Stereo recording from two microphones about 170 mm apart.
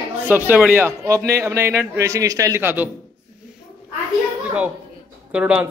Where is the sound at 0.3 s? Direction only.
10° right (ahead or behind).